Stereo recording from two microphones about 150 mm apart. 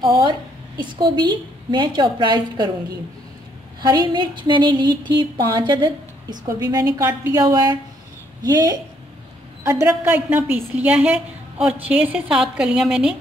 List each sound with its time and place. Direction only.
0.0 s a woman's voice: 30° right (ahead or behind)
3.8 s a woman's voice: 30° right (ahead or behind)
9.6 s a sound: 20° right (ahead or behind)
9.8 s a woman's voice: 10° right (ahead or behind)